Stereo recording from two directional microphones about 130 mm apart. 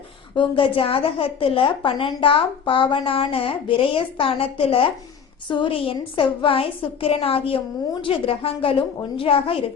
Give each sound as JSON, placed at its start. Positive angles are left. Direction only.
{"t": 0.3, "sound": "a woman's voice", "side_deg": 40}